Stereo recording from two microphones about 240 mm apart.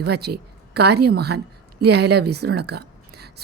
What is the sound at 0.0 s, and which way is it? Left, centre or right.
A woman's voice, right.